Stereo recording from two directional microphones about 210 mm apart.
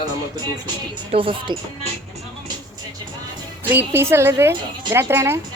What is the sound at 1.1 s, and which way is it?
Speech, 25° right (ahead or behind).